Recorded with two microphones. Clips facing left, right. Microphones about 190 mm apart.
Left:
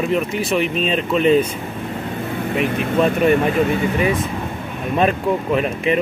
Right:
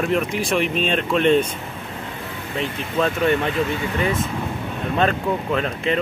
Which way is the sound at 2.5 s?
15° left (ahead or behind).